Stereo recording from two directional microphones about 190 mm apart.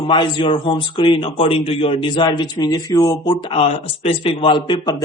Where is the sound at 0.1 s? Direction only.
25° left (ahead or behind).